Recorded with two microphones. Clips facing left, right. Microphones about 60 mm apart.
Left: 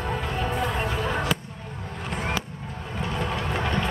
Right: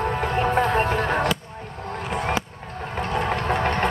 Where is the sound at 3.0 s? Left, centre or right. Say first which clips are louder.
Right 5 dB; right.